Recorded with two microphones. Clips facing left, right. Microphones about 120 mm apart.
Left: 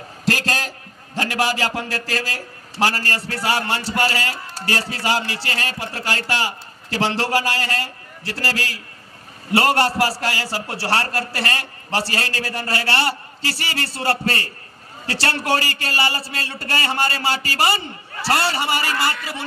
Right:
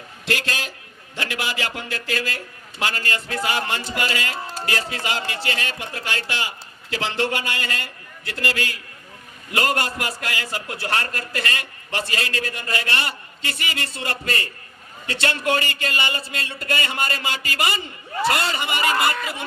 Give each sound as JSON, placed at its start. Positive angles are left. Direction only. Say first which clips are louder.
{"t": 0.3, "sound": "a man's voice", "louder": "left 4 dB", "side_deg": 40}